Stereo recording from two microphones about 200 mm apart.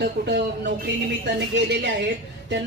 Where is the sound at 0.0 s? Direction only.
60° right (ahead or behind).